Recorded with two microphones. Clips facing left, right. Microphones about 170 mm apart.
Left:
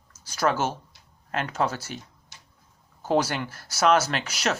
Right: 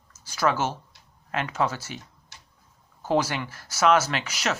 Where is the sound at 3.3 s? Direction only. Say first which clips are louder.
Left 1 dB; 40° left (ahead or behind).